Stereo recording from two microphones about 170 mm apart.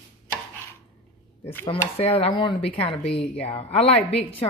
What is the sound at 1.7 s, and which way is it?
Dishes, 35° left (ahead or behind).